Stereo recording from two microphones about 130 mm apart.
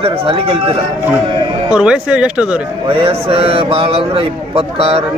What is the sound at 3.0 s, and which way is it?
A man's voice, 50° right (ahead or behind).